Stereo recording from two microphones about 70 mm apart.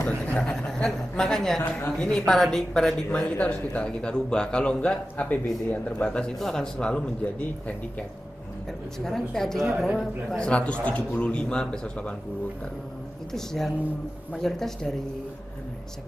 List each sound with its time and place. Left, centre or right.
0.2 s a man's voice: centre
3.1 s a man's voice: centre
9.0 s a woman's voice: centre
10.3 s a man's voice: centre
13.3 s a woman's voice: centre